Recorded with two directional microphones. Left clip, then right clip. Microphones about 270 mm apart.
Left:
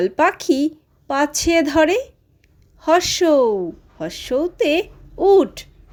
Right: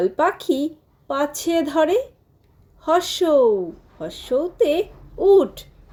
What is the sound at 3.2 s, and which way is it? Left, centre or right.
Speech, left.